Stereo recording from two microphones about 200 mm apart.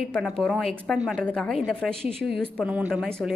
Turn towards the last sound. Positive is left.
turn(degrees=0)  # may be behind; listen again after turning